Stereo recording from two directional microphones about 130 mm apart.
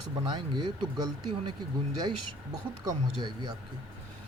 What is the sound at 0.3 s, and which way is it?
Speech, 35° right (ahead or behind).